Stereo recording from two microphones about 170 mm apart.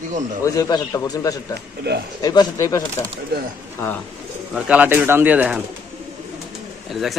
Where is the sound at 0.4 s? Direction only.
20° left (ahead or behind).